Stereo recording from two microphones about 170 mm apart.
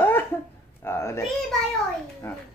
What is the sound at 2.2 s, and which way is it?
Speech, 15° left (ahead or behind).